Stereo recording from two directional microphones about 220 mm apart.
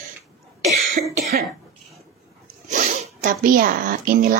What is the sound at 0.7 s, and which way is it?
Cough, 40° right (ahead or behind).